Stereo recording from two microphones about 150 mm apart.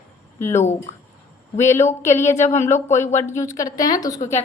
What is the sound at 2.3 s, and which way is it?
A woman's voice, 50° left (ahead or behind).